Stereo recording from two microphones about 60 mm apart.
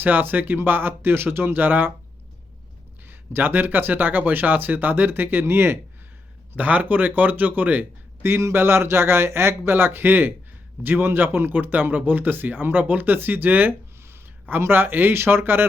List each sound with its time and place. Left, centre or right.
0.0 s speech: right
3.0 s speech: right
6.6 s speech: right